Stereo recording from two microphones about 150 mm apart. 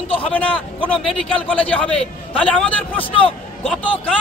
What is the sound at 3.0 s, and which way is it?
Speech, 35° left (ahead or behind).